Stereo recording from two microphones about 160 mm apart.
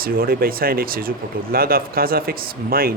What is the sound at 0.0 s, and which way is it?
Speech, 65° right (ahead or behind).